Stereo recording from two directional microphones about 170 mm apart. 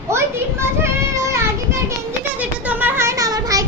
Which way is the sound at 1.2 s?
15° right (ahead or behind).